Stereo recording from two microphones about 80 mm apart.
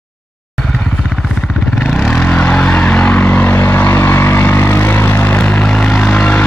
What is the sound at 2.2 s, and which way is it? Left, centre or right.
Vehicle, centre.